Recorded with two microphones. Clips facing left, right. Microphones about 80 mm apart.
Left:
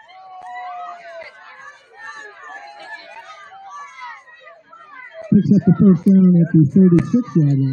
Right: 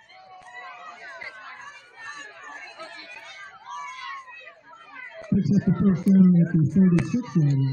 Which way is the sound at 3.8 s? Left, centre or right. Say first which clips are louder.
Even; left.